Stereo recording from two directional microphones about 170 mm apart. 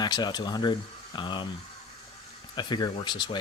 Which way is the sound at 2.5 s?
25° left (ahead or behind).